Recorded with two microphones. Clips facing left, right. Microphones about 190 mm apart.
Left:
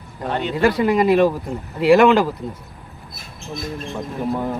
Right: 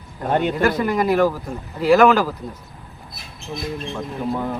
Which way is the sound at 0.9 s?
20° left (ahead or behind).